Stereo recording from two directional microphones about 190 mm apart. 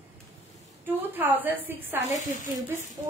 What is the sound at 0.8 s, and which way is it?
A woman's voice, 10° right (ahead or behind).